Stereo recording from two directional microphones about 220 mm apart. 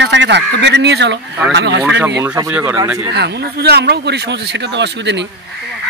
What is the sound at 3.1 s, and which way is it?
Speech, 50° right (ahead or behind).